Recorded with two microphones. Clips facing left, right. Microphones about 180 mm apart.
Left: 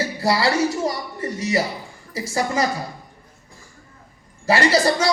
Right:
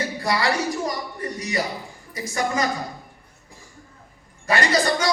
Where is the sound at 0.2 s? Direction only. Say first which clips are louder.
Left 5 dB; 30° left (ahead or behind).